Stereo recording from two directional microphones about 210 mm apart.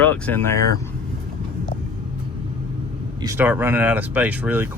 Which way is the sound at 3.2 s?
10° right (ahead or behind).